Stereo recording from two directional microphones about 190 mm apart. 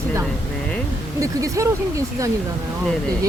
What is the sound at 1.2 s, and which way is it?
Speech, 15° right (ahead or behind).